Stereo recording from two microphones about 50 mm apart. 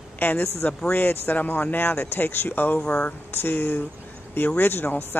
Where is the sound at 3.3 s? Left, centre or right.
Left.